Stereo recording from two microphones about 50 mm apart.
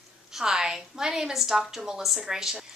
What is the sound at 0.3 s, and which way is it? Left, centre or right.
A woman's voice, centre.